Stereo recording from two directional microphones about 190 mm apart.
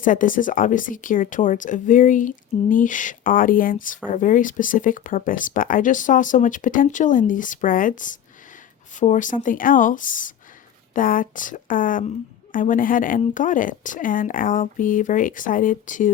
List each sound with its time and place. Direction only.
0.0 s speech: 45° left (ahead or behind)